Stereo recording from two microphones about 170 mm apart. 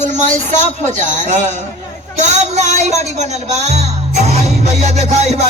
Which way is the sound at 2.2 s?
45° right (ahead or behind).